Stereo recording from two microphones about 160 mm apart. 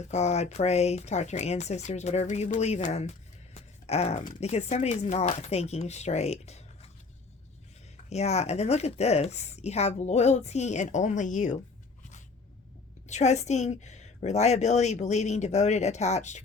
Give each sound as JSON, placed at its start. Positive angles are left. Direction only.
{"t": 0.1, "sound": "speech", "side_deg": 45}
{"t": 8.1, "sound": "speech", "side_deg": 40}
{"t": 13.1, "sound": "speech", "side_deg": 45}